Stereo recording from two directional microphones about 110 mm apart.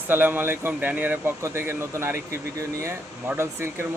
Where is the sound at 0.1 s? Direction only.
15° right (ahead or behind).